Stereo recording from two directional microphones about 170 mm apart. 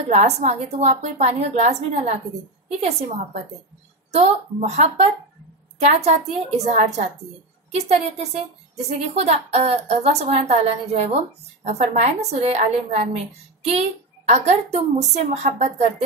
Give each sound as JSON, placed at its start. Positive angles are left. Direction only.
{"t": 0.1, "sound": "a woman's voice", "side_deg": -40}